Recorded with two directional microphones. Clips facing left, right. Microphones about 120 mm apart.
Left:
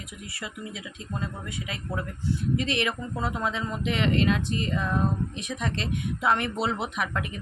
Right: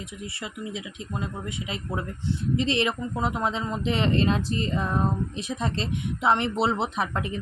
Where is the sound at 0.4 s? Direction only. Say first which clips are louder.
Right 2 dB; 25° right (ahead or behind).